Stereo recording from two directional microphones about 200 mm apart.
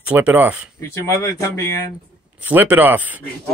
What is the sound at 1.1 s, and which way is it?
Speech, 15° left (ahead or behind).